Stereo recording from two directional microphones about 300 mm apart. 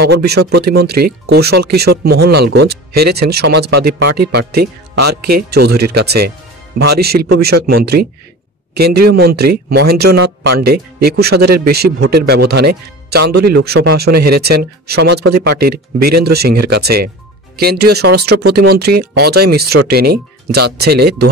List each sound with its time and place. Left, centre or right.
0.0 s speech: right
10.2 s speech: right
10.6 s speech: right